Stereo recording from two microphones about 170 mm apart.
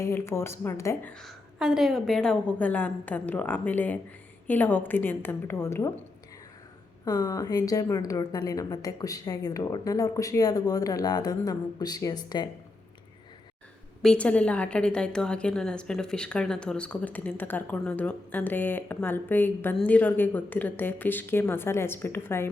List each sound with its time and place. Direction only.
0.0 s a woman's voice: 15° left (ahead or behind)
1.1 s a woman's voice: centre (ahead or behind)
7.0 s speech: 20° left (ahead or behind)
14.0 s a woman's voice: 5° left (ahead or behind)